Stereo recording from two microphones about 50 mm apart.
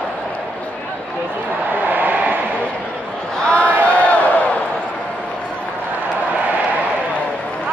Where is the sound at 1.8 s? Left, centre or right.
Right.